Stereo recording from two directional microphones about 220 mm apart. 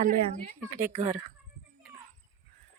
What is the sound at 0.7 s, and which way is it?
Speech, 35° right (ahead or behind).